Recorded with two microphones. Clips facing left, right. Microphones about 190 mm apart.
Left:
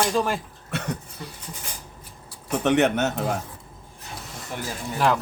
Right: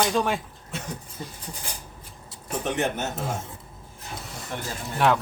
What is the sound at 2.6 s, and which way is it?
Speech, 70° left (ahead or behind).